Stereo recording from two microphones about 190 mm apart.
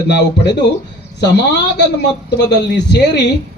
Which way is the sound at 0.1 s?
60° left (ahead or behind).